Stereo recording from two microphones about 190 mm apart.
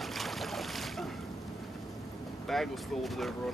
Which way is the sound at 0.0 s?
Centre (ahead or behind).